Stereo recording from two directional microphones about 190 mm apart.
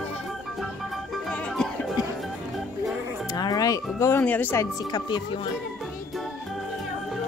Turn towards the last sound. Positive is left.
turn(degrees=25)  # may be behind; listen again after turning